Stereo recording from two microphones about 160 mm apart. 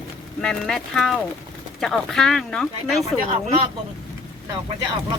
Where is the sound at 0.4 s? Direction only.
5° left (ahead or behind).